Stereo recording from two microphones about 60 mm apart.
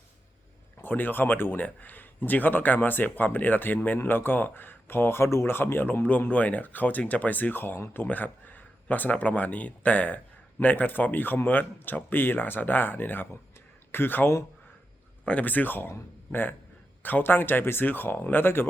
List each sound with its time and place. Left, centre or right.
0.8 s speech: left
15.2 s speech: left